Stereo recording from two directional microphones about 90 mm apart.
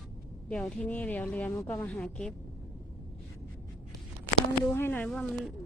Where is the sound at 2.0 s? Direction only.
5° left (ahead or behind).